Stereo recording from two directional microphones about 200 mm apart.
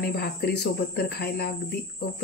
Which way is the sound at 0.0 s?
50° left (ahead or behind).